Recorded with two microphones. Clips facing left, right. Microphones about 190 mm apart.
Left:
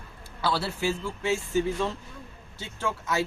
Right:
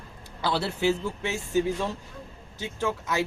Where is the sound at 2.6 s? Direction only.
15° right (ahead or behind).